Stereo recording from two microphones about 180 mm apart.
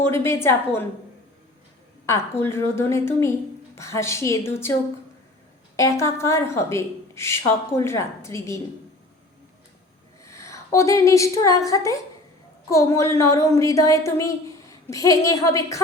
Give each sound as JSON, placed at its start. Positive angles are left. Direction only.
{"t": 0.0, "sound": "a woman's voice", "side_deg": 15}
{"t": 2.0, "sound": "a woman's voice", "side_deg": 15}
{"t": 5.7, "sound": "a woman's voice", "side_deg": 15}
{"t": 10.2, "sound": "a woman's voice", "side_deg": 15}